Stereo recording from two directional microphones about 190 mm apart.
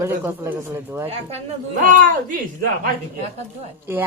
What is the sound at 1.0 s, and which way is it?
Speech, 35° right (ahead or behind).